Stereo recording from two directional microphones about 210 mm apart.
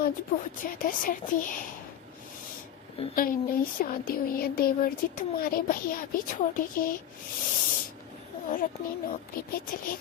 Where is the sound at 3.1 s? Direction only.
45° left (ahead or behind).